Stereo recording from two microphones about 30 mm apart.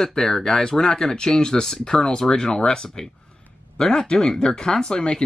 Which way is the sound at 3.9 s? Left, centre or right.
Left.